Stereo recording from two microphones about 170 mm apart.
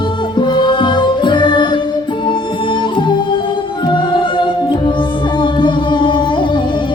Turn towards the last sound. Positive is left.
turn(degrees=30)  # may be behind; listen again after turning